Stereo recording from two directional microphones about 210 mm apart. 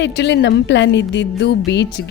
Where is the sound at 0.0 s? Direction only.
55° left (ahead or behind).